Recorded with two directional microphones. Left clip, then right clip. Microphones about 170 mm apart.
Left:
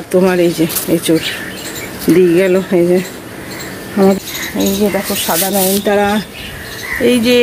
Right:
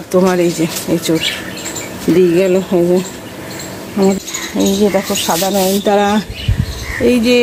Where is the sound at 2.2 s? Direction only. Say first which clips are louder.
Even; 5° right (ahead or behind).